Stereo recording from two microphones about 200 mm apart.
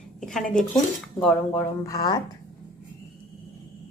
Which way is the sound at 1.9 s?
15° left (ahead or behind).